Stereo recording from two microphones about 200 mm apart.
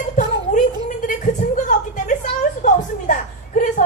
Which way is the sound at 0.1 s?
40° left (ahead or behind).